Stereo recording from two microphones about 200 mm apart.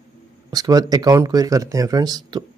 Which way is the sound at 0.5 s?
20° right (ahead or behind).